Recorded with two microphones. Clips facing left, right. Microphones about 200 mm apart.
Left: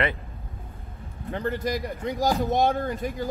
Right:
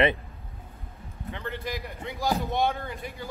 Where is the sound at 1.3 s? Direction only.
40° left (ahead or behind).